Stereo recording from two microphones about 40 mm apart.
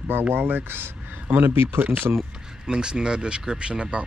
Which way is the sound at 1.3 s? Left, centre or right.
Right.